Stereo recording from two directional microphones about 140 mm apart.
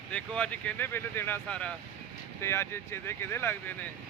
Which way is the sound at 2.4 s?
20° left (ahead or behind).